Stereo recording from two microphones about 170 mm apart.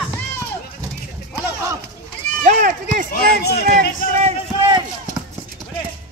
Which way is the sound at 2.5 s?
50° right (ahead or behind).